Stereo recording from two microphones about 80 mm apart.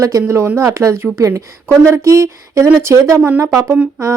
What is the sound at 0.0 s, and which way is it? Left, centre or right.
Speech, right.